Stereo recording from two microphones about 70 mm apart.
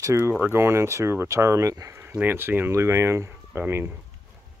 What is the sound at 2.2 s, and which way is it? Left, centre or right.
Speech, right.